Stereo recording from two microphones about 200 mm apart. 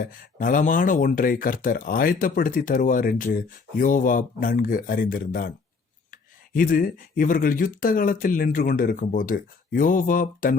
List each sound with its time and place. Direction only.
0.0 s speech: 45° left (ahead or behind)